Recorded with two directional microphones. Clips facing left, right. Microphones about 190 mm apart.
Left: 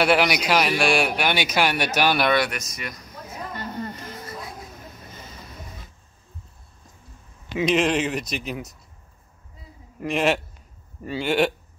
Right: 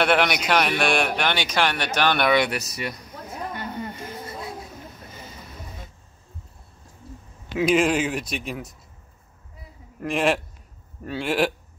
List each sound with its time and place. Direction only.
0.0 s a man's voice: 5° left (ahead or behind)
2.5 s speech: 30° right (ahead or behind)
4.3 s a sound: 25° right (ahead or behind)
7.5 s a man's voice: 5° right (ahead or behind)
9.9 s a man's voice: centre (ahead or behind)